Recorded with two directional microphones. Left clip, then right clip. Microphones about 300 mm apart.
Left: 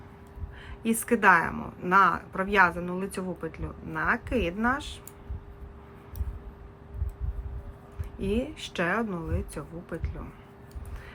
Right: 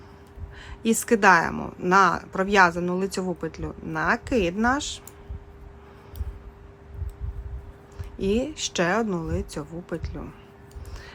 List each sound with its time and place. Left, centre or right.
0.6 s a woman's voice: centre
8.2 s a woman's voice: centre